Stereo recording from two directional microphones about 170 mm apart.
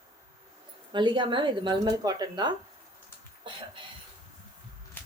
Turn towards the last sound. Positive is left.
turn(degrees=-30)  # may be behind; listen again after turning